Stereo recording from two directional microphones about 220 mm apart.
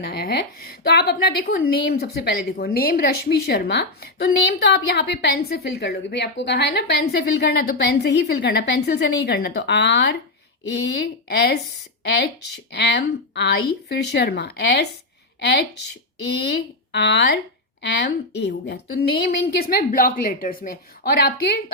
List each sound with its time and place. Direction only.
0.0 s a woman's voice: 45° left (ahead or behind)
11.3 s a woman's voice: 50° left (ahead or behind)
12.7 s a woman's voice: 50° left (ahead or behind)